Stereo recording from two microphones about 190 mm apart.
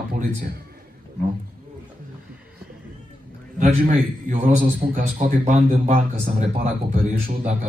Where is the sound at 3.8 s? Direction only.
40° right (ahead or behind).